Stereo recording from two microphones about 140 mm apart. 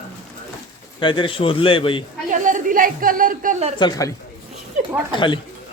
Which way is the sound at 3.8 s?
25° left (ahead or behind).